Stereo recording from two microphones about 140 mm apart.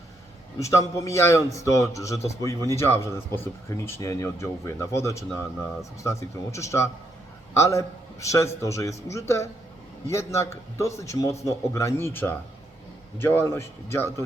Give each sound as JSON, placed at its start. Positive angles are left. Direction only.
{"t": 0.6, "sound": "a man's voice", "side_deg": 25}